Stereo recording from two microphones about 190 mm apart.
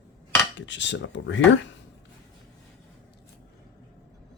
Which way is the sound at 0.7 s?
70° left (ahead or behind).